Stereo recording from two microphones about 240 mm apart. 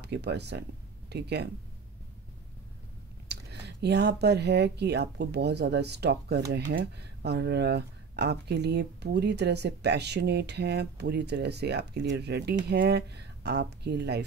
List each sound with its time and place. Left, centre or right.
0.0 s speech: right
3.3 s speech: right